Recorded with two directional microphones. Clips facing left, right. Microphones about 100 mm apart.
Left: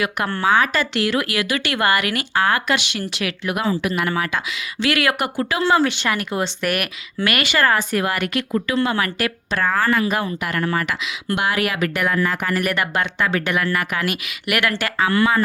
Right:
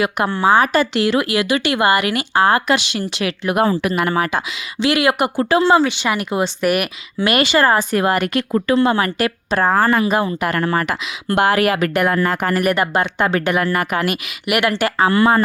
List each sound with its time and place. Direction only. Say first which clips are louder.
0.3 s speech: right 3 dB; 15° right (ahead or behind)
3.6 s speech: right 5 dB; 50° right (ahead or behind)
4.0 s speech: right 4 dB; 35° right (ahead or behind)
5.8 s speech: right 1 dB; centre (ahead or behind)
6.1 s speech: right 3 dB; 15° right (ahead or behind)
7.3 s speech: right 4 dB; 30° right (ahead or behind)
12.6 s speech: right 5 dB; 30° right (ahead or behind)
14.5 s speech: right 4 dB; 20° right (ahead or behind)
14.9 s speech: right 3 dB; 30° right (ahead or behind)